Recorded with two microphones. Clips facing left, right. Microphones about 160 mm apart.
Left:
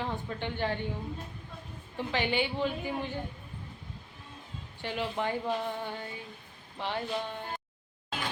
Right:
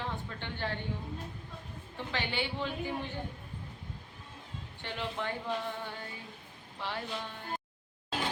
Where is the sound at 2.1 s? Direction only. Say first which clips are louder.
Left 5 dB; 15° left (ahead or behind).